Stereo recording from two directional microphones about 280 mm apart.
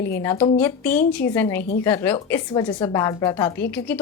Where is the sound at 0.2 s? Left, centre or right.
Centre.